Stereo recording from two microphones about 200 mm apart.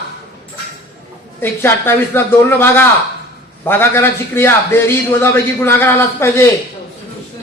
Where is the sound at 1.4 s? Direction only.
10° left (ahead or behind).